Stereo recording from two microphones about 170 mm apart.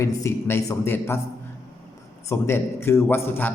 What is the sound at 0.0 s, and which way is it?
Speech, 15° left (ahead or behind).